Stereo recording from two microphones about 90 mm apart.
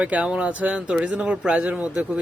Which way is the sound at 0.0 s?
10° right (ahead or behind).